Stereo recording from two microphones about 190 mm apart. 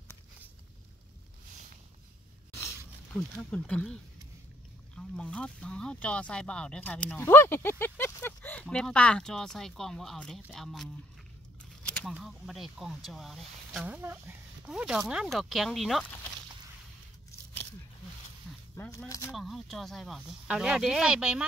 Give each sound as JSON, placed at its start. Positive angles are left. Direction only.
{"t": 3.1, "sound": "speech", "side_deg": 5}
{"t": 12.1, "sound": "speech", "side_deg": 0}
{"t": 18.8, "sound": "speech", "side_deg": 15}
{"t": 19.3, "sound": "speech", "side_deg": 0}